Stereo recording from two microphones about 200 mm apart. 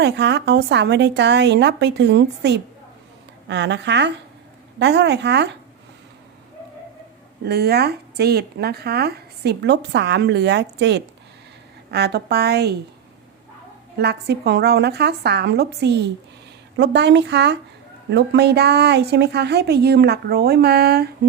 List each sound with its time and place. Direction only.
0.0 s speech: 55° right (ahead or behind)
7.4 s speech: 55° right (ahead or behind)
14.0 s speech: 55° right (ahead or behind)